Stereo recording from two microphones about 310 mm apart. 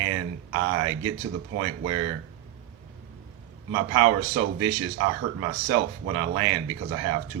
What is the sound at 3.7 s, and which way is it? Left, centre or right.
Speech, right.